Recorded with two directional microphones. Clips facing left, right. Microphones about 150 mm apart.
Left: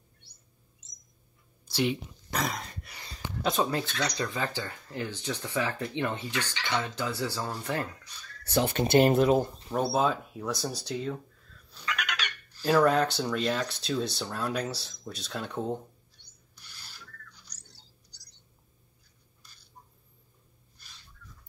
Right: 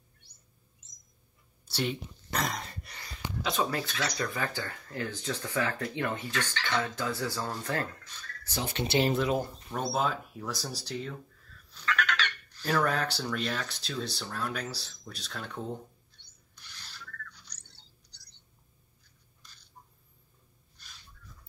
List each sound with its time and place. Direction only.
1.7 s speech: 10° left (ahead or behind)
4.2 s speech: 20° left (ahead or behind)
8.5 s speech: 60° left (ahead or behind)
9.7 s speech: 10° left (ahead or behind)
10.0 s speech: 20° left (ahead or behind)
11.7 s frog: 10° left (ahead or behind)
12.8 s speech: 20° left (ahead or behind)